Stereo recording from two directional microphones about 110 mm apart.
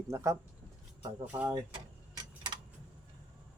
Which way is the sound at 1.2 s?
10° right (ahead or behind).